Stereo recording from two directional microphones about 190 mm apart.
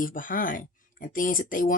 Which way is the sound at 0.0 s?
45° left (ahead or behind).